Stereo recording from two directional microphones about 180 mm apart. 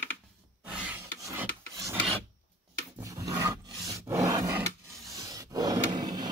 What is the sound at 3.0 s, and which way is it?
Rub, 20° right (ahead or behind).